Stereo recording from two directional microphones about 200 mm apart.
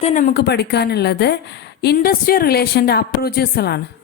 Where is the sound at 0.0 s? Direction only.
40° left (ahead or behind).